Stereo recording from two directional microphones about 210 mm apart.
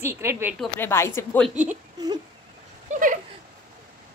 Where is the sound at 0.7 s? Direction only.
10° left (ahead or behind).